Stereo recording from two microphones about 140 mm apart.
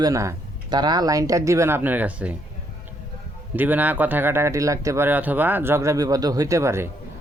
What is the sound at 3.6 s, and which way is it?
Speech, 10° right (ahead or behind).